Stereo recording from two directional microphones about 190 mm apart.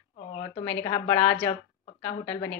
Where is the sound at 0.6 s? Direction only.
15° left (ahead or behind).